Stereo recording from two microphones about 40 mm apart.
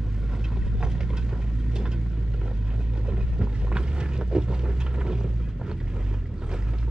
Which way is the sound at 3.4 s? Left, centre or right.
Right.